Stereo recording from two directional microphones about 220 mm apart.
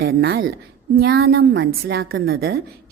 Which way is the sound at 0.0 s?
45° right (ahead or behind).